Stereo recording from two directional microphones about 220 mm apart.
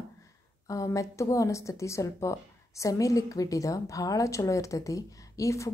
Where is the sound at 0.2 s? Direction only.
15° left (ahead or behind).